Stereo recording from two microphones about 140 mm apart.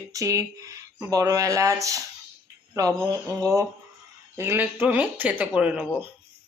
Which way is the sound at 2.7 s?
25° right (ahead or behind).